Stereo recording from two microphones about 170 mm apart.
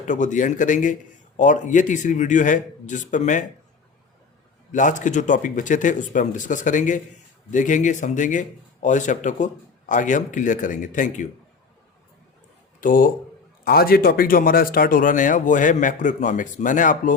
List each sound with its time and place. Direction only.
0.1 s speech: 45° left (ahead or behind)
4.7 s speech: 50° left (ahead or behind)
12.8 s speech: 55° left (ahead or behind)